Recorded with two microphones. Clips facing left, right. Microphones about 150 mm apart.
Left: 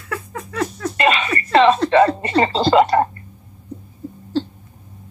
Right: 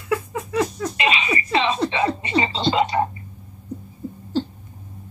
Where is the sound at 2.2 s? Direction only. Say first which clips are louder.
Left 5 dB; 50° left (ahead or behind).